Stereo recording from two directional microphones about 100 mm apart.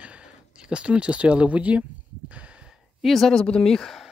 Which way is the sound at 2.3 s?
10° right (ahead or behind).